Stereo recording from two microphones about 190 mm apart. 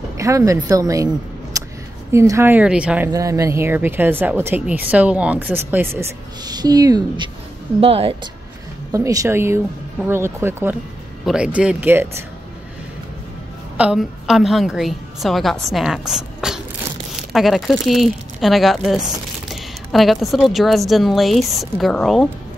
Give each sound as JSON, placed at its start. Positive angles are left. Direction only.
{"t": 0.2, "sound": "speech", "side_deg": -15}
{"t": 1.5, "sound": "a sound", "side_deg": -15}
{"t": 2.1, "sound": "speech", "side_deg": -15}
{"t": 3.1, "sound": "speech", "side_deg": -15}
{"t": 6.4, "sound": "speech", "side_deg": -20}
{"t": 8.9, "sound": "speech", "side_deg": -15}
{"t": 13.7, "sound": "speech", "side_deg": -5}